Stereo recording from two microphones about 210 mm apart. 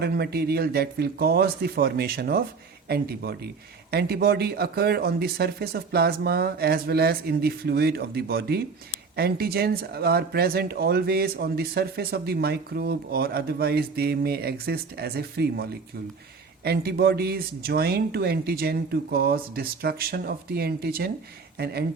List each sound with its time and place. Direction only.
0.0 s speech: 50° right (ahead or behind)
16.6 s speech: 50° right (ahead or behind)